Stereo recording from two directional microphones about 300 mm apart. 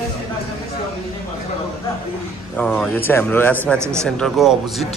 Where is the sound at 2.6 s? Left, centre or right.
Centre.